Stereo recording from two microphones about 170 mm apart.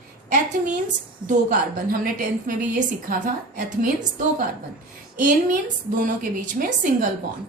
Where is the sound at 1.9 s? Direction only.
55° right (ahead or behind).